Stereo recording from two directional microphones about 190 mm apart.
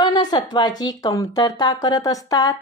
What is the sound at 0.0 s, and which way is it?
Speech, 20° left (ahead or behind).